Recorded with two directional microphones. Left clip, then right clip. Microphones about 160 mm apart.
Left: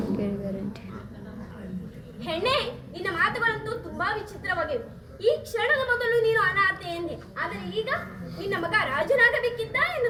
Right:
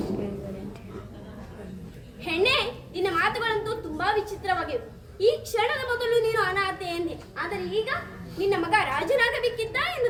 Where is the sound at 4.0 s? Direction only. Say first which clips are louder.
Right 4 dB; 35° right (ahead or behind).